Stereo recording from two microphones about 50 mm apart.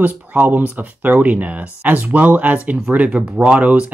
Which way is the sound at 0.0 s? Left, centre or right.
Right.